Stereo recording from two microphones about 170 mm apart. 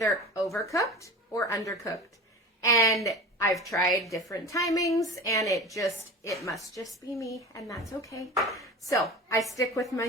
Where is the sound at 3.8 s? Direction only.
Centre (ahead or behind).